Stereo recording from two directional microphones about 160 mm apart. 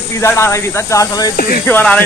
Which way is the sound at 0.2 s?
15° left (ahead or behind).